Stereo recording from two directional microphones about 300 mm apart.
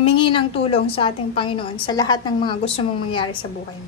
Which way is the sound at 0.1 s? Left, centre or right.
Centre.